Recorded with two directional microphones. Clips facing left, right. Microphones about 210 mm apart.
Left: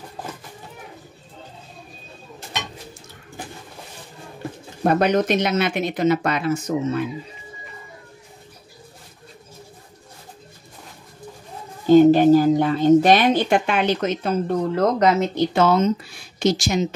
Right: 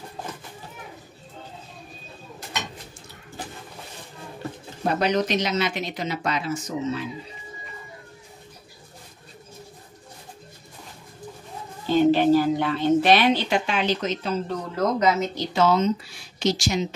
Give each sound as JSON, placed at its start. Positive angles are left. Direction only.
{"t": 4.8, "sound": "speech", "side_deg": 55}
{"t": 11.8, "sound": "speech", "side_deg": 45}